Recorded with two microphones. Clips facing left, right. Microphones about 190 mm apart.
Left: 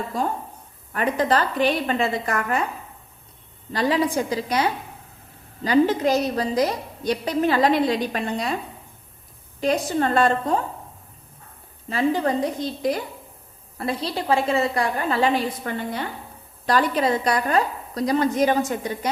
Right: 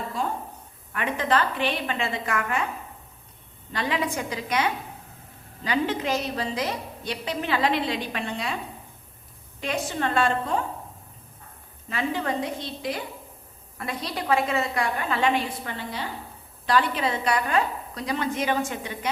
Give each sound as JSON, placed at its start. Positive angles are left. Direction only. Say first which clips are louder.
{"t": 0.2, "sound": "a sound", "louder": "left 4 dB", "side_deg": 45}
{"t": 0.9, "sound": "a woman's voice", "louder": "left 4 dB", "side_deg": 35}
{"t": 3.7, "sound": "a woman's voice", "louder": "left 6 dB", "side_deg": 35}
{"t": 9.6, "sound": "a woman's voice", "louder": "left 7 dB", "side_deg": 35}
{"t": 11.9, "sound": "a woman's voice", "louder": "left 6 dB", "side_deg": 35}
{"t": 13.7, "sound": "a woman's voice", "louder": "left 5 dB", "side_deg": 30}